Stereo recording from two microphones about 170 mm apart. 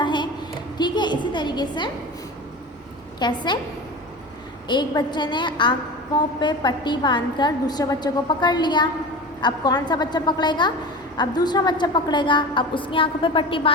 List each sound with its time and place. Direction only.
0.0 s a sound: 25° left (ahead or behind)
3.2 s a woman's voice: 25° left (ahead or behind)
4.7 s a woman's voice: 25° left (ahead or behind)